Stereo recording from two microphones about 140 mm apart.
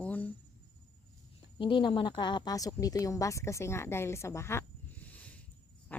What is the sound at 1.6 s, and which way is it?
A woman's voice, 35° left (ahead or behind).